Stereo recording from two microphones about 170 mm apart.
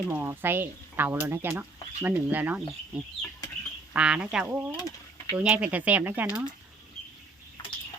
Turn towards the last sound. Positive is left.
turn(degrees=-10)  # may be behind; listen again after turning